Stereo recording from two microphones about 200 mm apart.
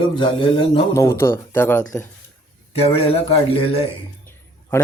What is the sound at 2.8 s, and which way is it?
Speech, 30° left (ahead or behind).